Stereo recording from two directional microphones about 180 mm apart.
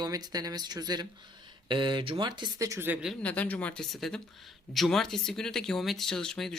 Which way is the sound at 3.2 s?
10° left (ahead or behind).